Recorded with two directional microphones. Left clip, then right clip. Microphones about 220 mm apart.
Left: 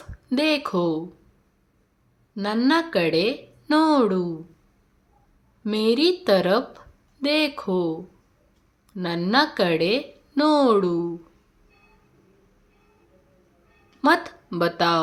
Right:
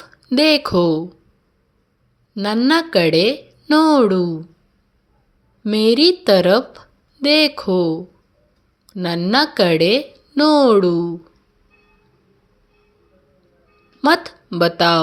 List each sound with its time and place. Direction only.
0.0 s speech: 25° right (ahead or behind)
2.3 s a woman's voice: 20° right (ahead or behind)
5.6 s a woman's voice: 25° right (ahead or behind)
14.0 s speech: 20° right (ahead or behind)